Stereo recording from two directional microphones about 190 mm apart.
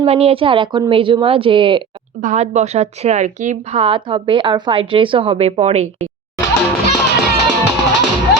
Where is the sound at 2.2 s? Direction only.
35° right (ahead or behind).